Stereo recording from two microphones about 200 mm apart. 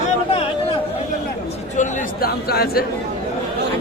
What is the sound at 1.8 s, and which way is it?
Speech, 50° left (ahead or behind).